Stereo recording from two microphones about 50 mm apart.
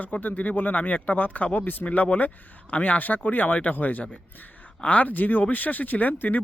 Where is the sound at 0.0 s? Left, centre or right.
Left.